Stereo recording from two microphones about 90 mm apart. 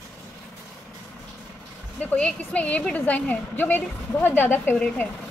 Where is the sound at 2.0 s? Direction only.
15° left (ahead or behind).